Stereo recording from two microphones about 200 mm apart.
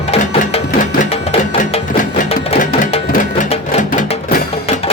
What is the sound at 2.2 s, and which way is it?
Music, 35° left (ahead or behind).